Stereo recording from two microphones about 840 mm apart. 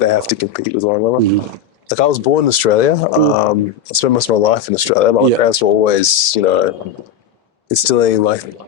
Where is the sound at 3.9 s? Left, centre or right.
Left.